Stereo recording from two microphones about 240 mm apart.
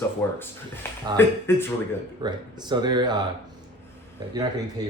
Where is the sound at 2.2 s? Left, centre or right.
Centre.